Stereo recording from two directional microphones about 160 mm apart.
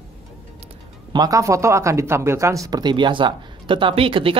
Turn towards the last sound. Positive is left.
turn(degrees=-35)  # may be behind; listen again after turning